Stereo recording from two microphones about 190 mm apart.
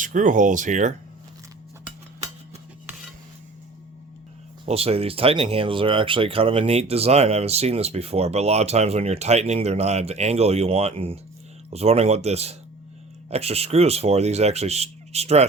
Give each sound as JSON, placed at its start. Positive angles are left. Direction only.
{"t": 0.0, "sound": "speech", "side_deg": -40}
{"t": 4.6, "sound": "speech", "side_deg": -30}